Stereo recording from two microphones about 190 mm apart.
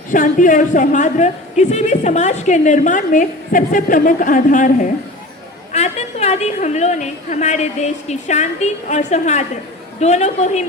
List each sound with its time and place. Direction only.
0.1 s a woman's voice: 45° left (ahead or behind)